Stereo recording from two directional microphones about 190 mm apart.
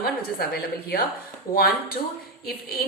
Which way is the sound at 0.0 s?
55° left (ahead or behind).